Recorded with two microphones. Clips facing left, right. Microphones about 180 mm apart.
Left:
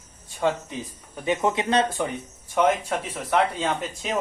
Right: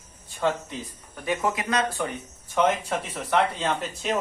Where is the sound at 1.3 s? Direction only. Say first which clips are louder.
Left 3 dB; 25° left (ahead or behind).